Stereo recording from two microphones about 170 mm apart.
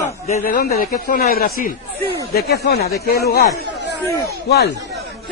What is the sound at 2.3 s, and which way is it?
Speech, 70° left (ahead or behind).